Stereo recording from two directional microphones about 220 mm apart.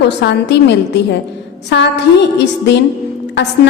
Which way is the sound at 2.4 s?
50° left (ahead or behind).